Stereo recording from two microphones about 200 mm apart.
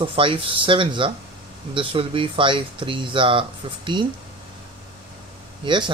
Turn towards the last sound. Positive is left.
turn(degrees=-25)  # may be behind; listen again after turning